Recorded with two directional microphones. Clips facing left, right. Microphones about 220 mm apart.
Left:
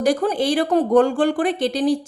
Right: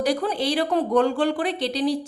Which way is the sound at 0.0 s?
45° left (ahead or behind).